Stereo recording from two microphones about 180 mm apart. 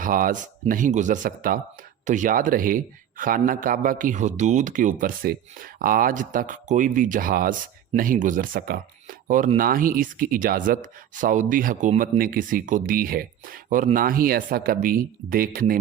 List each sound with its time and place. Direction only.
0.0 s speech: 50° right (ahead or behind)